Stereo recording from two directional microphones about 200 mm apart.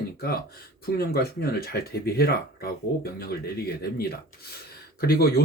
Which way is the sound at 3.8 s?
50° left (ahead or behind).